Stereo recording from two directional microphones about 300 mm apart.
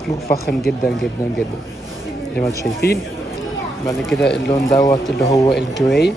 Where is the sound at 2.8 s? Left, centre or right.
Left.